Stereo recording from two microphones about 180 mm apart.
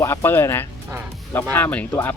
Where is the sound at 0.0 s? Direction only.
15° left (ahead or behind).